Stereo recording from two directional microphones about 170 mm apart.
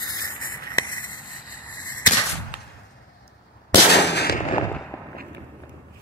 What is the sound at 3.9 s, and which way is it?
Firecracker, 80° left.